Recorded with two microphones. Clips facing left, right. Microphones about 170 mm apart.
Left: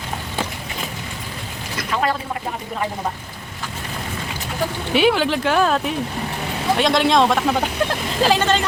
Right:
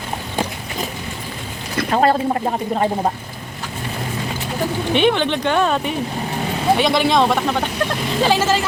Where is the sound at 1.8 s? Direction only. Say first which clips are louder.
Right 7 dB; 40° right (ahead or behind).